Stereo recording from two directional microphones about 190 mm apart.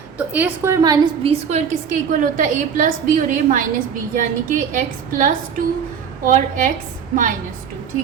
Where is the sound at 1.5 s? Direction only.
40° right (ahead or behind).